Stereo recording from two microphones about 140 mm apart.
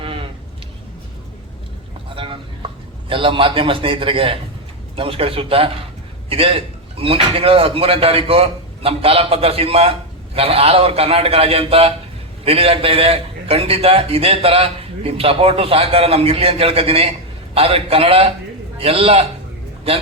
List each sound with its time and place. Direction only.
0.0 s sheep: 40° right (ahead or behind)
2.1 s a sound: 40° right (ahead or behind)
3.1 s a man's voice: 40° right (ahead or behind)